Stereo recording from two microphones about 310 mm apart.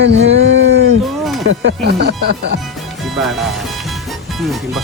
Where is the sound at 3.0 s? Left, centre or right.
Centre.